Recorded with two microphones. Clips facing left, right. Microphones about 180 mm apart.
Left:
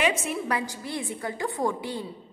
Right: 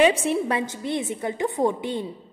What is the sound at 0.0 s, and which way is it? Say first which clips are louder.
A woman's voice: right 7 dB; 30° right (ahead or behind).